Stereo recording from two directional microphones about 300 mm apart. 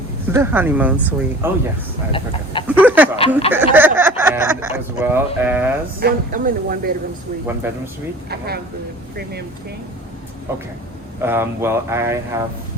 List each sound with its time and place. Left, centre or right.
0.3 s speech: centre
2.1 s speech: centre
2.6 s speech: centre
6.0 s speech: right
8.3 s speech: right
10.5 s speech: centre